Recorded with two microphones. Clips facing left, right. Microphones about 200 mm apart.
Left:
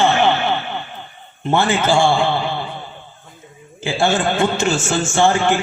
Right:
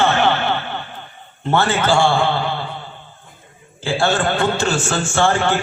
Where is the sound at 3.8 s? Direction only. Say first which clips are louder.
Even; 20° left (ahead or behind).